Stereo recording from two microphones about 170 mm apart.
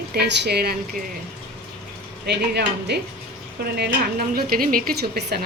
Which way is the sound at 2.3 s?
75° right (ahead or behind).